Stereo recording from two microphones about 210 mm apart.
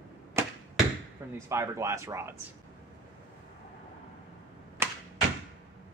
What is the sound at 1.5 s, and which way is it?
Speech, 15° right (ahead or behind).